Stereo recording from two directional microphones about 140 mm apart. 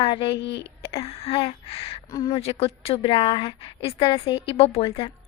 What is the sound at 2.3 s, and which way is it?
A woman's voice, 45° left (ahead or behind).